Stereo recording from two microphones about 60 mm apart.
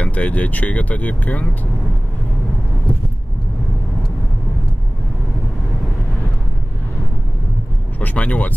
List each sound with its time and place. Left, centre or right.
0.0 s speech: left
8.0 s speech: left